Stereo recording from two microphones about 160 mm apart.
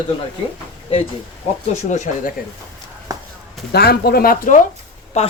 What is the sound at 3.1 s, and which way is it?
Walk, 20° right (ahead or behind).